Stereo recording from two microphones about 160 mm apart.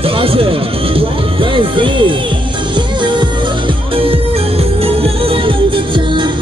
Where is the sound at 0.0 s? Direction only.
35° right (ahead or behind).